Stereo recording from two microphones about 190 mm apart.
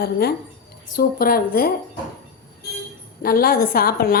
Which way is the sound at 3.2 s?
55° left (ahead or behind).